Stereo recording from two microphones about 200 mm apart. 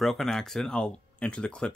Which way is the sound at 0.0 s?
Centre (ahead or behind).